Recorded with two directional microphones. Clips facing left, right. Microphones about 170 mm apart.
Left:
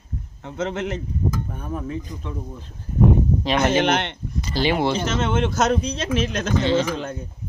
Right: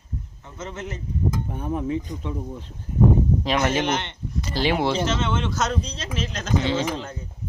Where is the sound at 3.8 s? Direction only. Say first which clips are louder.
Left 4 dB; 65° left (ahead or behind).